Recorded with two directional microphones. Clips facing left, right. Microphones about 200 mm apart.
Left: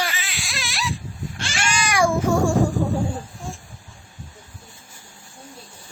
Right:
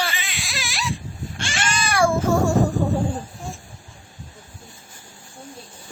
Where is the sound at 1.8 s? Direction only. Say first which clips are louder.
Right 1 dB; 15° left (ahead or behind).